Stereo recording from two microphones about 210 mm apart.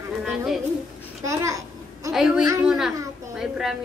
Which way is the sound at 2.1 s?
Centre (ahead or behind).